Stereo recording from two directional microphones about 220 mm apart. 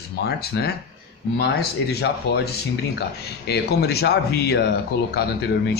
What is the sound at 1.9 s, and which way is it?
Speech, 45° left (ahead or behind).